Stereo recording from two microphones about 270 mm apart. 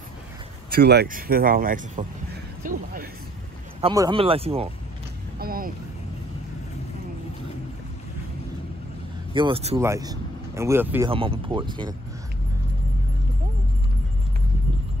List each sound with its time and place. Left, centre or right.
0.7 s speech: right
3.8 s speech: centre
5.4 s speech: right
9.3 s speech: centre
9.8 s speech: centre
11.1 s speech: centre